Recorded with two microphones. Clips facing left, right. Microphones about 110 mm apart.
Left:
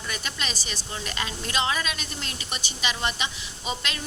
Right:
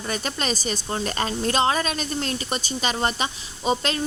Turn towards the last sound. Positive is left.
turn(degrees=-40)  # may be behind; listen again after turning